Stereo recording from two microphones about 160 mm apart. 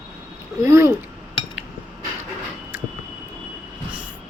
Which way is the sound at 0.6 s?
15° right (ahead or behind).